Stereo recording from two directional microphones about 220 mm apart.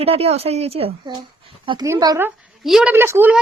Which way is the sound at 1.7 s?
15° right (ahead or behind).